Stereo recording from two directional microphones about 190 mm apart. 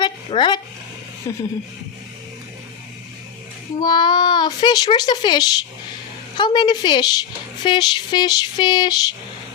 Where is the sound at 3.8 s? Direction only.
25° left (ahead or behind).